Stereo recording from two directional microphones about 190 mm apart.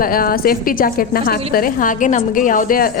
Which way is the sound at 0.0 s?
50° left (ahead or behind).